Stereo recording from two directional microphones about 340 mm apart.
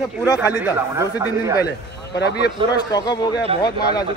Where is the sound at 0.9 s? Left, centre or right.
Centre.